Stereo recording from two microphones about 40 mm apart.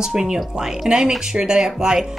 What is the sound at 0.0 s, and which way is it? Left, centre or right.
A woman's voice, centre.